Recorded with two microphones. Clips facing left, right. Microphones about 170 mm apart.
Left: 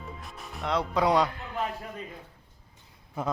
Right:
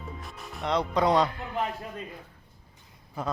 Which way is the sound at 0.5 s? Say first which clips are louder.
Right 1 dB; centre (ahead or behind).